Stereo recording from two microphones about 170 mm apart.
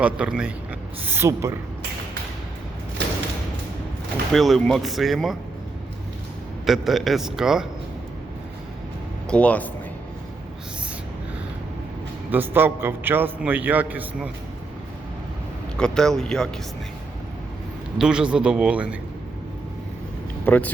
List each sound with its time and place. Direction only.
0.0 s a man's voice: 5° right (ahead or behind)
4.3 s speech: centre (ahead or behind)
6.7 s speech: centre (ahead or behind)
9.2 s speech: 5° left (ahead or behind)
12.3 s a man's voice: 10° right (ahead or behind)
15.8 s speech: 5° left (ahead or behind)
17.9 s a man's voice: 5° right (ahead or behind)
20.4 s speech: 10° left (ahead or behind)